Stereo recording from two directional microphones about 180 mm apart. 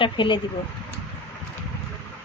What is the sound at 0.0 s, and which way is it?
Speech, 25° left (ahead or behind).